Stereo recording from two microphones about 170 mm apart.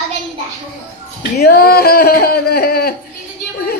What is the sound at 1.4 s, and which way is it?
Speech, 65° left (ahead or behind).